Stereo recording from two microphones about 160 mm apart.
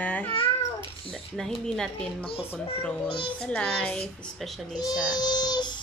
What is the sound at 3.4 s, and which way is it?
A child's voice, 5° left (ahead or behind).